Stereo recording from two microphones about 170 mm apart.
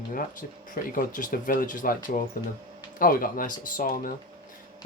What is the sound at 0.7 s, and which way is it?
Speech, 50° left (ahead or behind).